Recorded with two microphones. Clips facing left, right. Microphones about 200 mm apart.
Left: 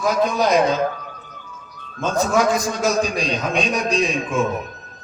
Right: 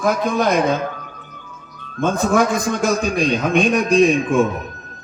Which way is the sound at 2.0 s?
55° right (ahead or behind).